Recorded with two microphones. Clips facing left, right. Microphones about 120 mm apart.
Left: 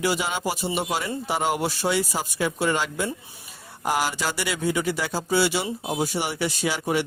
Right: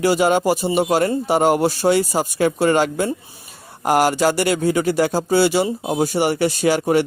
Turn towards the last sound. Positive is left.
turn(degrees=-45)  # may be behind; listen again after turning